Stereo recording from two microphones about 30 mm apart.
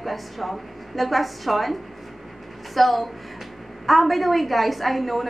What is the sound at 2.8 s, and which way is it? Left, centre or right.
A woman's voice, centre.